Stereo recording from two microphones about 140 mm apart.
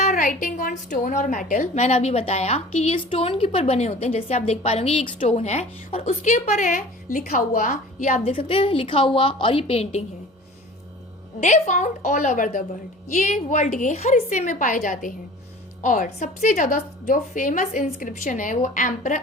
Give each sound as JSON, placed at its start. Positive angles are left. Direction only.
{"t": 0.0, "sound": "a woman's voice", "side_deg": 65}
{"t": 5.4, "sound": "a woman's voice", "side_deg": 55}
{"t": 8.3, "sound": "a woman's voice", "side_deg": 40}
{"t": 11.3, "sound": "a woman's voice", "side_deg": 55}
{"t": 13.1, "sound": "a woman's voice", "side_deg": 55}